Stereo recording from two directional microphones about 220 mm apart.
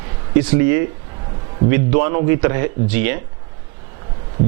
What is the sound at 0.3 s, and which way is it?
A man's voice, 10° right (ahead or behind).